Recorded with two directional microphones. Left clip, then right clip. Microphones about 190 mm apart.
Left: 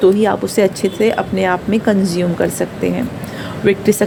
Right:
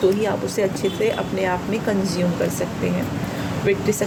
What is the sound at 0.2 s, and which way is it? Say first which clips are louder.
Speech: left 7 dB; 60° left (ahead or behind).